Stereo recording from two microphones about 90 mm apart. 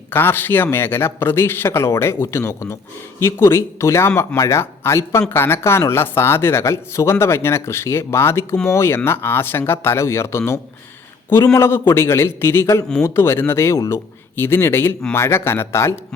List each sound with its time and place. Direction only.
0.1 s speech: 25° left (ahead or behind)
13.7 s speech: 40° left (ahead or behind)
14.3 s speech: 25° left (ahead or behind)